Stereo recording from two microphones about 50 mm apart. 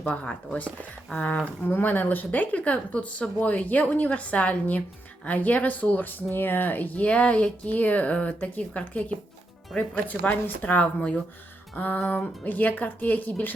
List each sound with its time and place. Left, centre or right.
0.0 s speech: left
11.9 s speech: left